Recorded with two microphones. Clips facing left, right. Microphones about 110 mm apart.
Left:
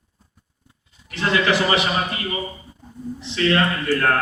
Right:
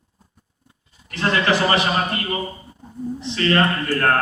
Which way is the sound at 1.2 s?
40° right (ahead or behind).